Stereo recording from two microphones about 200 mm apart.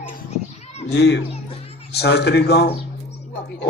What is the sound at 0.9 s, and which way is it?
A man's voice, 60° left (ahead or behind).